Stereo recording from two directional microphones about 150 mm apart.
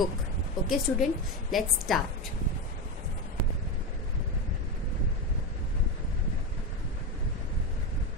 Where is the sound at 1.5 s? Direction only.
Centre (ahead or behind).